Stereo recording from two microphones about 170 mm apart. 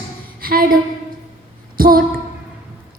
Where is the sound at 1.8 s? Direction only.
60° right (ahead or behind).